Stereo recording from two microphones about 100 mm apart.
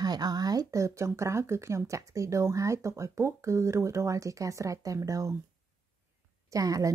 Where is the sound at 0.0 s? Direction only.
40° right (ahead or behind).